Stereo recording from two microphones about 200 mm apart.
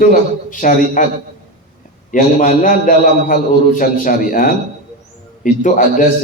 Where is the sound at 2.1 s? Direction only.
40° left (ahead or behind).